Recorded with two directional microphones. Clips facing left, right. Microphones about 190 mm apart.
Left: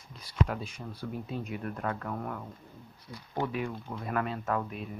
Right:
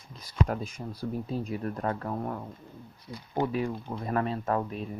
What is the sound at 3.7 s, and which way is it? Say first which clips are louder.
Speech: right 3 dB; 30° right (ahead or behind).